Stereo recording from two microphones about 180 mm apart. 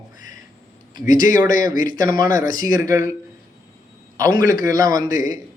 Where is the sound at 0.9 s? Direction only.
25° right (ahead or behind).